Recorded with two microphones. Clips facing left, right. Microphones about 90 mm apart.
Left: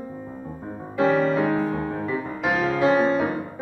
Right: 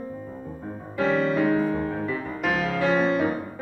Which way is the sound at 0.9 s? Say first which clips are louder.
Left 3 dB; 10° left (ahead or behind).